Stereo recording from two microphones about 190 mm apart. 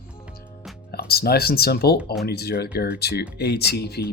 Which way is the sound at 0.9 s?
55° left (ahead or behind).